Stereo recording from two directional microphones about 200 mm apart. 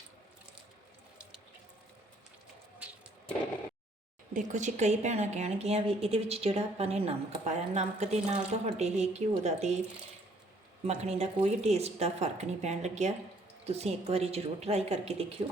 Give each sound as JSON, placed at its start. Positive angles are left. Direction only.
{"t": 4.4, "sound": "speech", "side_deg": -35}
{"t": 10.8, "sound": "speech", "side_deg": -30}